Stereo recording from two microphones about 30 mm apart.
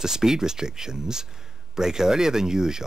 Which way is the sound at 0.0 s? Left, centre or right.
Centre.